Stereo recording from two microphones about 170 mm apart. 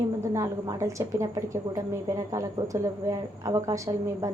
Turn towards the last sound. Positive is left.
turn(degrees=-20)  # may be behind; listen again after turning